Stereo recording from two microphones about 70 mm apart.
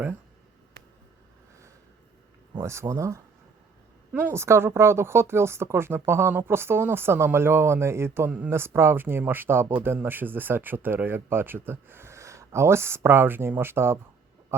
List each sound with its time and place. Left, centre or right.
2.6 s speech: right
4.3 s speech: right